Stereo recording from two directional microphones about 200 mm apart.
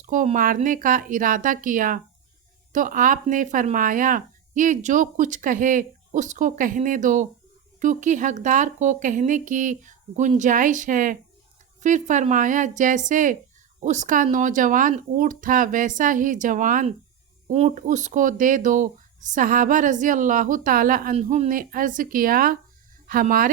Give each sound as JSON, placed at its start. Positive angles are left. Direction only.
{"t": 0.0, "sound": "speech", "side_deg": -40}